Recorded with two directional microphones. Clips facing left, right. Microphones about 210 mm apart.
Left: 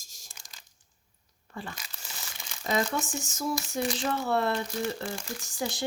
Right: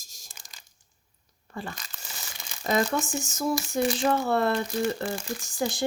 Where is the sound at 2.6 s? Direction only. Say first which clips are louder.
Right 3 dB; 50° right (ahead or behind).